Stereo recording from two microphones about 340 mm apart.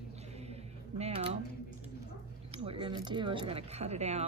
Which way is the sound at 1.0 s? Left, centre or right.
Centre.